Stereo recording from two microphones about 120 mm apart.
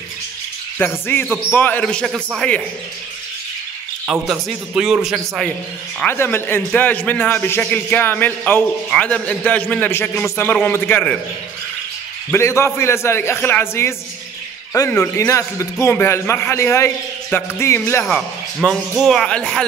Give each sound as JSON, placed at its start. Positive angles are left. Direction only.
{"t": 0.7, "sound": "a man's voice", "side_deg": 15}
{"t": 4.1, "sound": "speech", "side_deg": -5}
{"t": 5.9, "sound": "a man's voice", "side_deg": 15}
{"t": 12.3, "sound": "a man's voice", "side_deg": 25}
{"t": 18.0, "sound": "speech", "side_deg": 5}